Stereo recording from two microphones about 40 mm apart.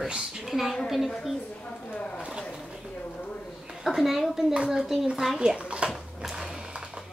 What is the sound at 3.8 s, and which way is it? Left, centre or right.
Speech, centre.